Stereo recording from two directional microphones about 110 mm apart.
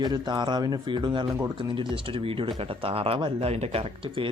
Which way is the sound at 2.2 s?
60° right (ahead or behind).